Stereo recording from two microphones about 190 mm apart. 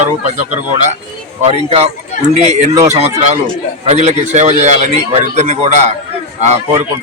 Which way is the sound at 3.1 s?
40° right (ahead or behind).